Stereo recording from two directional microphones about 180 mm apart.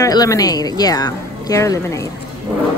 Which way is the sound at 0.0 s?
20° left (ahead or behind).